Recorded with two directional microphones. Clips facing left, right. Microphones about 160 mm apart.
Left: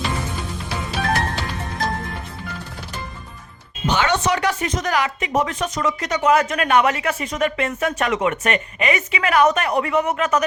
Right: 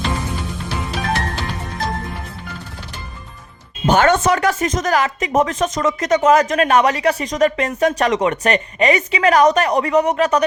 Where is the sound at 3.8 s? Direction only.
50° right (ahead or behind).